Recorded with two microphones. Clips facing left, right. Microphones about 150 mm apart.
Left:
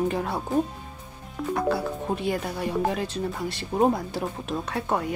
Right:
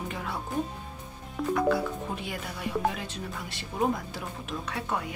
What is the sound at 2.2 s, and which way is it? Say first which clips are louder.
Speech: left 8 dB; 35° left (ahead or behind).